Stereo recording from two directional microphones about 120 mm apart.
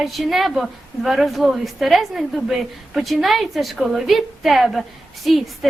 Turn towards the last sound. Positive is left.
turn(degrees=0)  # may be behind; listen again after turning